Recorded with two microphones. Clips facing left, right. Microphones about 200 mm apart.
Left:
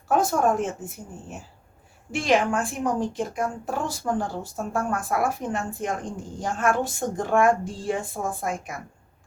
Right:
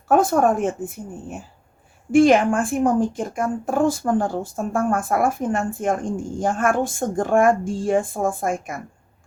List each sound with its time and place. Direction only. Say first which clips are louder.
0.1 s a woman's voice: right 5 dB; 55° right (ahead or behind)